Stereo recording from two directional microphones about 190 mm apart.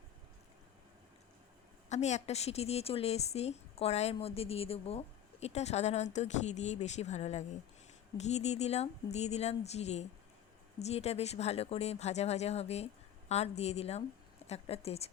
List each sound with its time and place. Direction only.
1.9 s a woman's voice: 35° left (ahead or behind)